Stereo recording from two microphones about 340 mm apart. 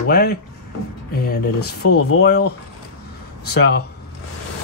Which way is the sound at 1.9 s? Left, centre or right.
Left.